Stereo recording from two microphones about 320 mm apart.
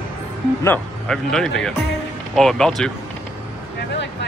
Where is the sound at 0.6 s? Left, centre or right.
Centre.